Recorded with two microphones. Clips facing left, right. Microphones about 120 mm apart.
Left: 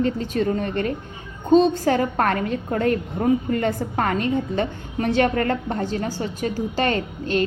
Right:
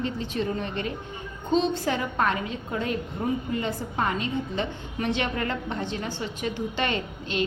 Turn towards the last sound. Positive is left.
turn(degrees=45)  # may be behind; listen again after turning